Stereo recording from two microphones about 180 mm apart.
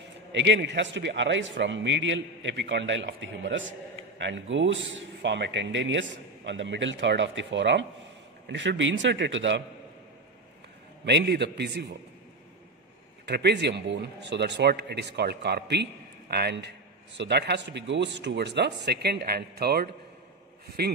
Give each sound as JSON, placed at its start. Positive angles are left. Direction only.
{"t": 0.3, "sound": "a man's voice", "side_deg": -75}
{"t": 11.1, "sound": "a man's voice", "side_deg": -70}
{"t": 13.2, "sound": "a man's voice", "side_deg": -70}